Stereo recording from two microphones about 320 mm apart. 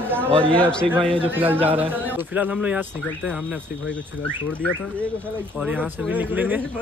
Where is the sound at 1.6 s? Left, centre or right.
Centre.